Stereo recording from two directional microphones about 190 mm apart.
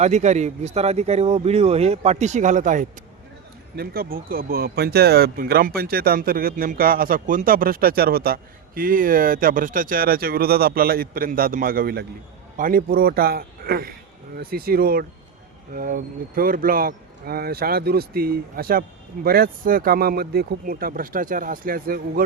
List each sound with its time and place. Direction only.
0.0 s speech: 35° right (ahead or behind)